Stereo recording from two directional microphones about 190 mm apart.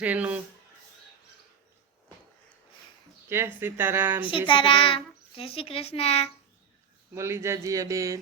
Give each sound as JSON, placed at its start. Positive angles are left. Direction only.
{"t": 0.0, "sound": "speech", "side_deg": -5}
{"t": 3.2, "sound": "speech", "side_deg": -15}
{"t": 4.2, "sound": "a child's voice", "side_deg": 25}
{"t": 7.1, "sound": "speech", "side_deg": -15}